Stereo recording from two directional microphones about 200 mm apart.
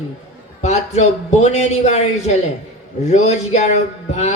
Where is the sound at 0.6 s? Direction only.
35° left (ahead or behind).